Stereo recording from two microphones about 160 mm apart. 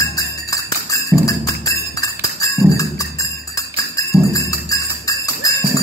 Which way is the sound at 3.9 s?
20° left (ahead or behind).